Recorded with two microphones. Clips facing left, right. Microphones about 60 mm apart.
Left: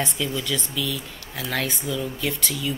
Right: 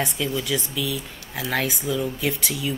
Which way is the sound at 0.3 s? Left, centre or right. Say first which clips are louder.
Right 2 dB; centre.